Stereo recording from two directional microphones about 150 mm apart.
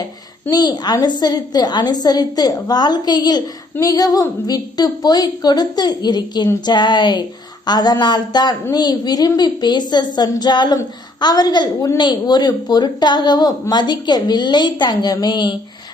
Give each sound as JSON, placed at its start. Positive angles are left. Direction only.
{"t": 0.5, "sound": "a woman's voice", "side_deg": 25}